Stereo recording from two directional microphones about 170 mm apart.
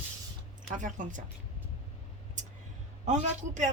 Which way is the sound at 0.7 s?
50° right (ahead or behind).